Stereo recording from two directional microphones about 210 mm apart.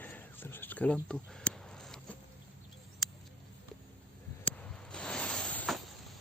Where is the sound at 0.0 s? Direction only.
10° left (ahead or behind).